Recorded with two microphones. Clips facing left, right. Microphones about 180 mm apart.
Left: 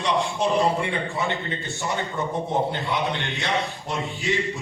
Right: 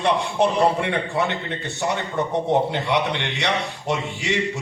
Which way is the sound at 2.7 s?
70° right (ahead or behind).